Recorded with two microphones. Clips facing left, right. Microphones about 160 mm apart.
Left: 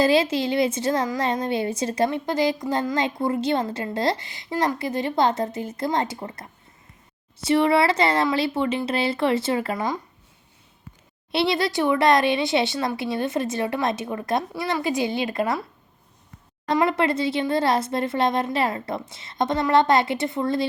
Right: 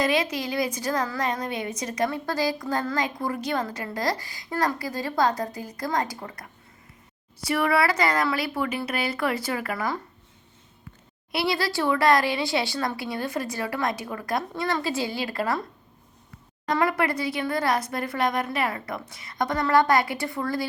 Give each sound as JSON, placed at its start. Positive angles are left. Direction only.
{"t": 0.0, "sound": "speech", "side_deg": 30}
{"t": 11.3, "sound": "speech", "side_deg": 25}
{"t": 16.7, "sound": "speech", "side_deg": 25}